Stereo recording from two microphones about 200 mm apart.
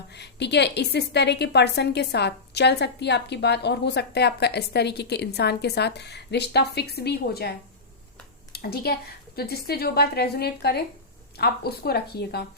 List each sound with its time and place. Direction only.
0.1 s a woman's voice: 55° left (ahead or behind)
8.5 s a woman's voice: 50° left (ahead or behind)